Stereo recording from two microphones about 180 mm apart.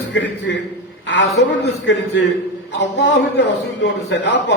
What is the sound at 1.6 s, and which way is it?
A man's voice, 80° left.